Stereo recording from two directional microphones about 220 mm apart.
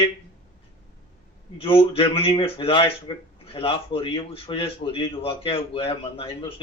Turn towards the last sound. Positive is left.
turn(degrees=25)  # may be behind; listen again after turning